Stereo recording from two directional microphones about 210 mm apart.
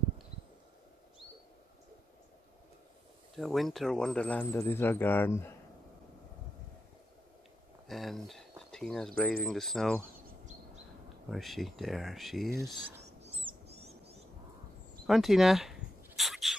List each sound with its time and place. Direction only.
3.3 s speech: centre (ahead or behind)
7.9 s speech: centre (ahead or behind)
11.2 s speech: centre (ahead or behind)
12.8 s a sound: 30° right (ahead or behind)
15.0 s bird: centre (ahead or behind)